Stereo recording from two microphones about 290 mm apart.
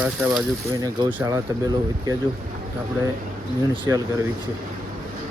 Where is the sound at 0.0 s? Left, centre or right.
Centre.